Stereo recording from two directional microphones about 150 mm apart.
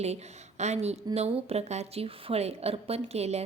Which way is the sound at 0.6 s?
45° right (ahead or behind).